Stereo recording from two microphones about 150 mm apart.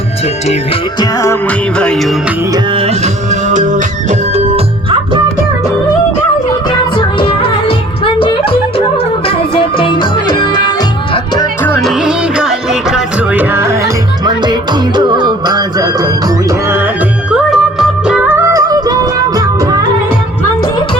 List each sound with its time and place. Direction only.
0.9 s music: 20° left (ahead or behind)
1.8 s music: 5° left (ahead or behind)
2.7 s music: 40° right (ahead or behind)
3.5 s music: 55° right (ahead or behind)
4.4 s music: 40° right (ahead or behind)
6.9 s music: 35° left (ahead or behind)
11.8 s music: centre (ahead or behind); by 13.9 s 15° right (ahead or behind)
14.3 s music: 30° right (ahead or behind)
16.6 s music: 15° right (ahead or behind)
18.5 s music: 25° right (ahead or behind)